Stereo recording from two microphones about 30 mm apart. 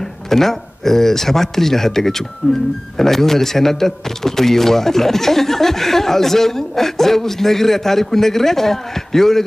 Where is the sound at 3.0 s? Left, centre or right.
Centre.